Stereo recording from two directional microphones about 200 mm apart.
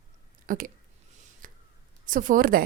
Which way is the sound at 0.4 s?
45° right (ahead or behind).